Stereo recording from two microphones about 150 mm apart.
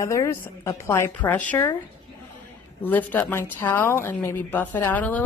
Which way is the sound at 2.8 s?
10° left (ahead or behind).